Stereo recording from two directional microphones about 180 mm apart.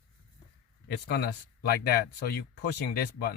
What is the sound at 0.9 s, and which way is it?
Speech, 65° left (ahead or behind).